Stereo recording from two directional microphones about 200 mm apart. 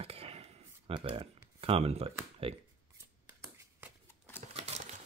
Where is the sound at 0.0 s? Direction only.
30° right (ahead or behind).